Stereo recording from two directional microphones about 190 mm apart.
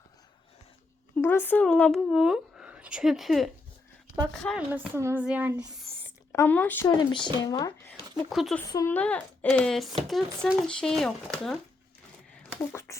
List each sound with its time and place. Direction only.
1.1 s speech: 10° left (ahead or behind)
4.7 s speech: 10° right (ahead or behind)
6.3 s speech: 10° left (ahead or behind)
6.8 s speech: 25° left (ahead or behind)
8.1 s speech: centre (ahead or behind)
8.7 s speech: 15° left (ahead or behind)
12.3 s a sound: 15° left (ahead or behind)